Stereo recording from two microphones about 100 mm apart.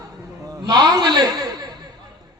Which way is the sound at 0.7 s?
40° right (ahead or behind).